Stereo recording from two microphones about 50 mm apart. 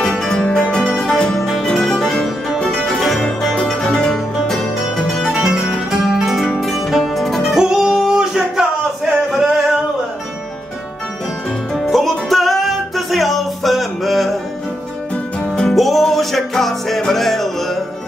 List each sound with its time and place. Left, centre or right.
0.3 s music: centre
5.3 s music: centre
7.4 s music: centre
11.7 s music: centre
15.4 s music: centre
15.7 s music: centre